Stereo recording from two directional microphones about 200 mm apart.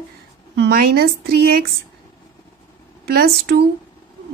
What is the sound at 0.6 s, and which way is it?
A woman's voice, 50° right (ahead or behind).